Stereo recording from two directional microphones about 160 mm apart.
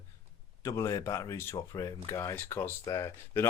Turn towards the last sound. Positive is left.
turn(degrees=20)  # may be behind; listen again after turning